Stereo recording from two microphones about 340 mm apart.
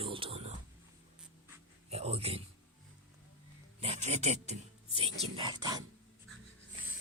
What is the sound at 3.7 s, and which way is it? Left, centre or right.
Speech, centre.